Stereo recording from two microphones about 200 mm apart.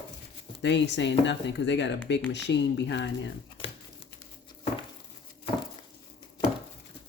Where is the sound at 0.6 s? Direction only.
60° left (ahead or behind).